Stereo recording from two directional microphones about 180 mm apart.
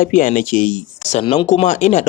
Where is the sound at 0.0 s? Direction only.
45° left (ahead or behind).